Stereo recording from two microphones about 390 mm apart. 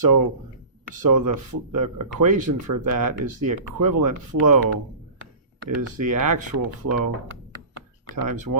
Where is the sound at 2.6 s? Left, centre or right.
Right.